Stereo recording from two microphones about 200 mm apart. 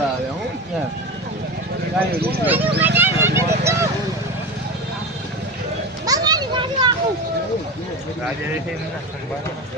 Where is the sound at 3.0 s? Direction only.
10° right (ahead or behind).